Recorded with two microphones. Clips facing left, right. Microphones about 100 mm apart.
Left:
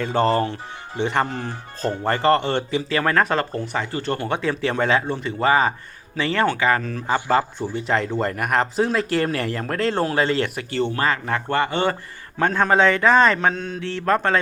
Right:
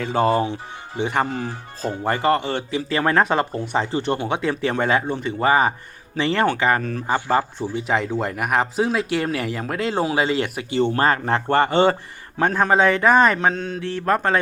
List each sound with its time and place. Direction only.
0.0 s speech: 5° right (ahead or behind)
2.9 s speech: 25° right (ahead or behind)
7.6 s speech: 5° right (ahead or behind)
10.9 s speech: 35° right (ahead or behind)
11.7 s speech: 25° right (ahead or behind)
12.4 s speech: 10° right (ahead or behind)
13.5 s speech: 40° right (ahead or behind)
14.0 s speech: 15° right (ahead or behind)